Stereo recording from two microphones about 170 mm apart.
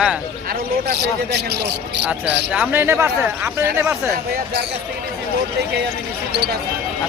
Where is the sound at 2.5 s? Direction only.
10° right (ahead or behind).